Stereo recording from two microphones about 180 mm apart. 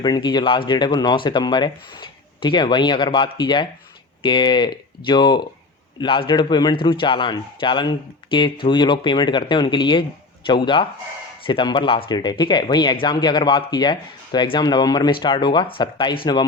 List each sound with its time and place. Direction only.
0.0 s a man's voice: 25° left (ahead or behind)